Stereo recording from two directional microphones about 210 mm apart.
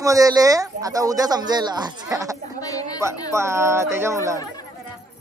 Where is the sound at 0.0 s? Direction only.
15° right (ahead or behind).